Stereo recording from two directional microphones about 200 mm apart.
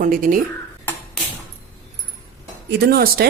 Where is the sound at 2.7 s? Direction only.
50° right (ahead or behind).